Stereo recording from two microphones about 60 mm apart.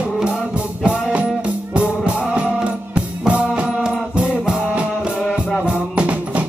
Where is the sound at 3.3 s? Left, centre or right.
Right.